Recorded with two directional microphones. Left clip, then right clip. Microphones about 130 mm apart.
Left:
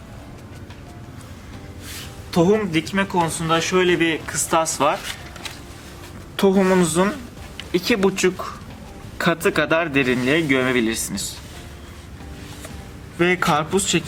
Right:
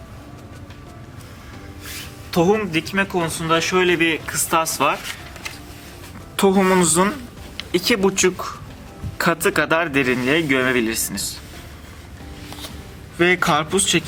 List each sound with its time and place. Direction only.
2.3 s speech: centre (ahead or behind)
6.3 s speech: 15° right (ahead or behind); by 11.3 s centre (ahead or behind)
13.1 s speech: 10° right (ahead or behind)